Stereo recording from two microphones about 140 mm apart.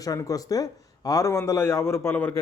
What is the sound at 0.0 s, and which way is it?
Speech, 25° left (ahead or behind).